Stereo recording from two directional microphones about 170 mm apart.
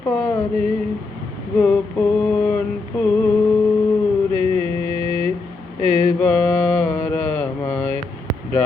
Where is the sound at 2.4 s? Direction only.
10° left (ahead or behind).